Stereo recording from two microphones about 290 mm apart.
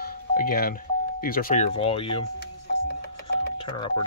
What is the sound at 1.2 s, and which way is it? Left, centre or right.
Speech, left.